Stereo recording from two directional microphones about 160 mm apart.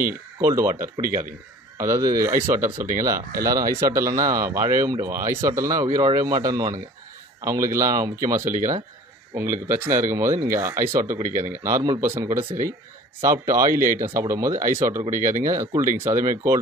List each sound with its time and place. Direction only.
0.0 s speech: 20° right (ahead or behind)
11.2 s a man's voice: 55° right (ahead or behind)
11.5 s speech: 20° right (ahead or behind)